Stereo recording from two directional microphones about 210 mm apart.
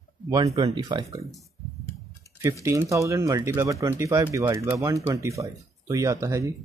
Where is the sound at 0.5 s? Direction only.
15° right (ahead or behind).